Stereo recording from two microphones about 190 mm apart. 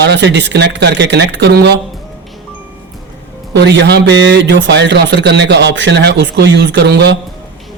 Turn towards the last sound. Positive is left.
turn(degrees=-60)  # may be behind; listen again after turning